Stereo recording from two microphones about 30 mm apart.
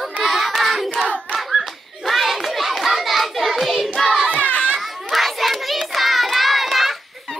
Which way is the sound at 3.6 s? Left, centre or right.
Centre.